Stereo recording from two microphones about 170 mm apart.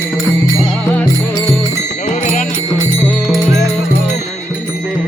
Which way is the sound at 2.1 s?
45° left (ahead or behind).